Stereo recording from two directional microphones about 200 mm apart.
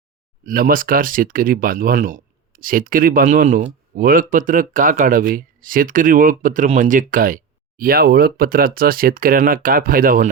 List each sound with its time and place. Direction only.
0.4 s speech: 45° right (ahead or behind)